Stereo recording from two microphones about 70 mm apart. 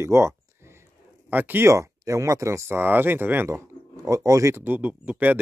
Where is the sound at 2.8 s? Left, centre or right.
Right.